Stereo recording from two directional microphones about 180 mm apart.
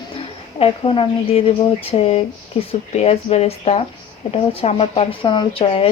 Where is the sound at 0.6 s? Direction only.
30° left (ahead or behind).